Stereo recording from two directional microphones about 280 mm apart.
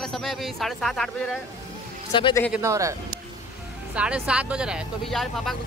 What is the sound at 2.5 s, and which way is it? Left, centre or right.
Speech, centre.